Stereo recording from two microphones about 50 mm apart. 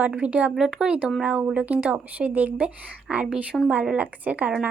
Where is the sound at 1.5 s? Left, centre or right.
Right.